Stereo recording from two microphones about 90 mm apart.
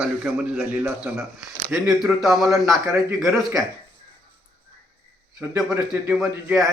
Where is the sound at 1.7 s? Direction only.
5° right (ahead or behind).